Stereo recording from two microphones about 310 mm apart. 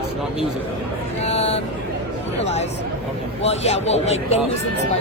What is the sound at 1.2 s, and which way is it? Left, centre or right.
Speech, centre.